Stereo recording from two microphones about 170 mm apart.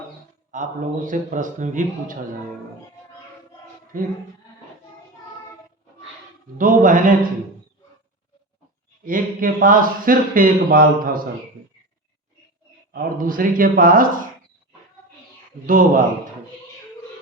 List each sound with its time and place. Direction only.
0.5 s a man's voice: 50° right (ahead or behind)
6.6 s a man's voice: 50° right (ahead or behind)
9.0 s a man's voice: 55° right (ahead or behind)
12.9 s a man's voice: 55° right (ahead or behind)
15.6 s a man's voice: 55° right (ahead or behind)